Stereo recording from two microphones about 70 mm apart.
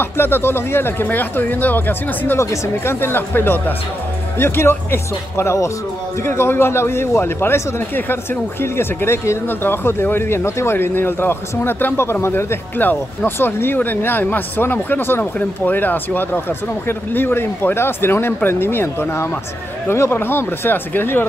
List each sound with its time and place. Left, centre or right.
0.0 s a man's voice: left
2.3 s a man's voice: left